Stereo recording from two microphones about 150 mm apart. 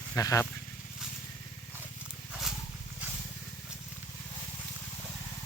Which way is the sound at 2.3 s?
Centre (ahead or behind).